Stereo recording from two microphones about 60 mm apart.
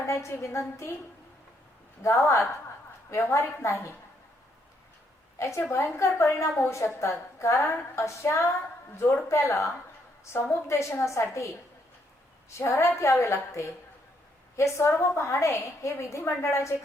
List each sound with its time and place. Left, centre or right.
0.0 s a woman's voice: left
2.0 s a woman's voice: left
5.4 s a woman's voice: left